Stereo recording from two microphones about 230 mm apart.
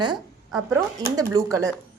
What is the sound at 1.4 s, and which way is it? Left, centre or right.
Speech, centre.